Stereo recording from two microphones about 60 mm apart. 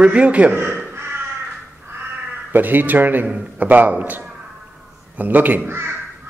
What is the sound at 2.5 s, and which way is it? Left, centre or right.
Speech, right.